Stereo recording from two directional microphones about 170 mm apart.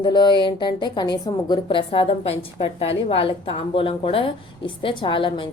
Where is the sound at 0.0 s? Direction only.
25° left (ahead or behind).